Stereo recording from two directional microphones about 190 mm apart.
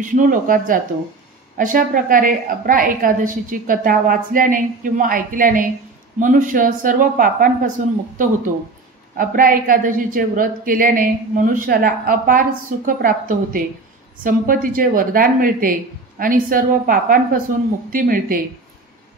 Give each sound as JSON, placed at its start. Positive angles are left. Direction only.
{"t": 0.0, "sound": "a woman's voice", "side_deg": -45}
{"t": 9.1, "sound": "a woman's voice", "side_deg": -45}